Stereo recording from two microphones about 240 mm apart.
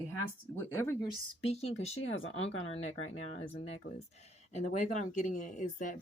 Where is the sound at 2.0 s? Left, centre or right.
Left.